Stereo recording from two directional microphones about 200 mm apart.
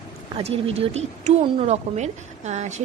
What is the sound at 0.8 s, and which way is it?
A woman's voice, 30° right (ahead or behind).